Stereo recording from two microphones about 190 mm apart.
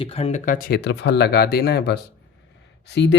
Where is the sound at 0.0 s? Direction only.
30° left (ahead or behind).